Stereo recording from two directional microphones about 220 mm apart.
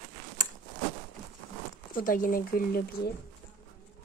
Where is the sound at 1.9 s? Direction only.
40° left (ahead or behind).